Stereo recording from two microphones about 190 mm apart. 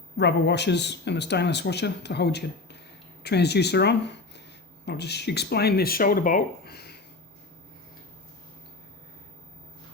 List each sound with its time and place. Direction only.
0.2 s speech: 65° left (ahead or behind)